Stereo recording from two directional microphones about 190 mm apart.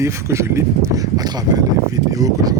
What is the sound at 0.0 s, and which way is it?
Speech, 15° right (ahead or behind).